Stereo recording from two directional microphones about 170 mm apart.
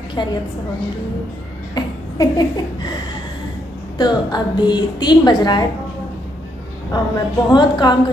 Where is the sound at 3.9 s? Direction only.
25° left (ahead or behind).